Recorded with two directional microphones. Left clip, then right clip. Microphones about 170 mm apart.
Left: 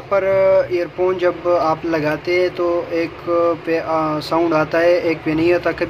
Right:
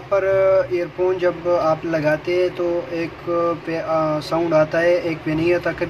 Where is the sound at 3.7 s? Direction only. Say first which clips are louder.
Left 2 dB; 25° left (ahead or behind).